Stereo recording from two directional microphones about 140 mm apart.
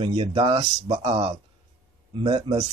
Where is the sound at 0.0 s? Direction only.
40° right (ahead or behind).